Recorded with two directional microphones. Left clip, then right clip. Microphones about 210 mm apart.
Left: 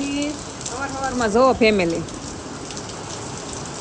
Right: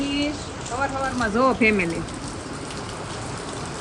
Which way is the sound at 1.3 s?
10° left (ahead or behind).